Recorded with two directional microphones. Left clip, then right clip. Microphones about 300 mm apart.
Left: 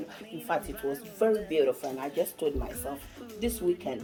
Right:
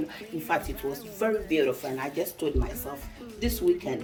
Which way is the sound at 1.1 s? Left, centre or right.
Left.